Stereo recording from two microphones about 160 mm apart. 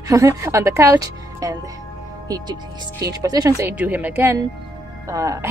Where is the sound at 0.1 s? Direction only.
20° right (ahead or behind).